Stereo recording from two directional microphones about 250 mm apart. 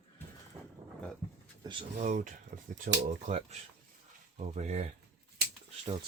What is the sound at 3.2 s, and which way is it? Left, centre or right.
Speech, right.